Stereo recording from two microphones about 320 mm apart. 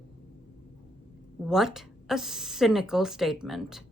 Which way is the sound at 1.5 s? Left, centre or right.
Centre.